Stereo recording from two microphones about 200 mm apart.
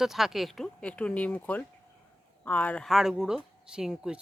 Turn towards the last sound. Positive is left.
turn(degrees=-5)  # may be behind; listen again after turning